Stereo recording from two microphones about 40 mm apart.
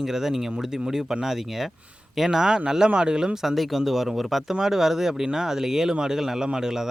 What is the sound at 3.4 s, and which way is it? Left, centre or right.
Speech, centre.